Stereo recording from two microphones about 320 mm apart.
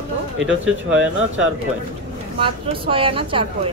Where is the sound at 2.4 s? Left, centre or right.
Centre.